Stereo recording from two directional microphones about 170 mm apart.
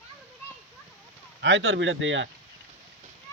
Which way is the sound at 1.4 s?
90° right.